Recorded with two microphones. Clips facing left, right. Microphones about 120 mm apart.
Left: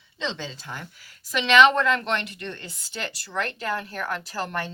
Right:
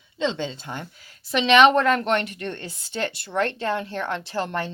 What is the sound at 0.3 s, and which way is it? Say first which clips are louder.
Speech: right 4 dB; 25° right (ahead or behind).